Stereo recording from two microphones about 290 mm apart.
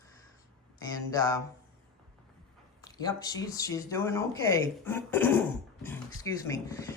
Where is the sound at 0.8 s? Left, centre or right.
Centre.